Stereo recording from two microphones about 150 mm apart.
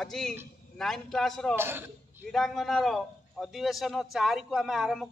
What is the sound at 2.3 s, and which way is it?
A man's voice, centre (ahead or behind).